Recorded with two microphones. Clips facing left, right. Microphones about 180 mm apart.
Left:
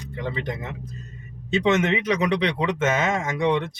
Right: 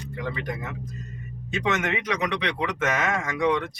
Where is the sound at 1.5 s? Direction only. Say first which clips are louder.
Left 6 dB; 25° left (ahead or behind).